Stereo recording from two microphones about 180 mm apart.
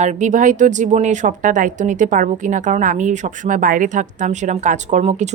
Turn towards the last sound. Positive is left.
turn(degrees=-40)  # may be behind; listen again after turning